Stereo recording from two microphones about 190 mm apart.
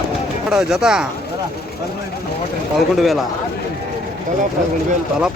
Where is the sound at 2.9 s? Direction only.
Centre (ahead or behind).